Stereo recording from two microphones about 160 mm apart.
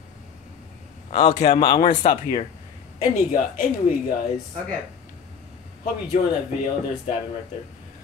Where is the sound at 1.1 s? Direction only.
40° left (ahead or behind).